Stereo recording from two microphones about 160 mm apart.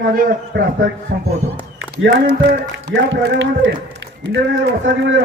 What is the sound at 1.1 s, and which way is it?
Speech, 90° right.